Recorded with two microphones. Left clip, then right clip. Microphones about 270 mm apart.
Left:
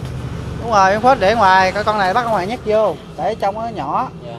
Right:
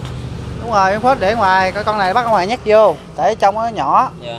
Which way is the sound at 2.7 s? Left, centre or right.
Right.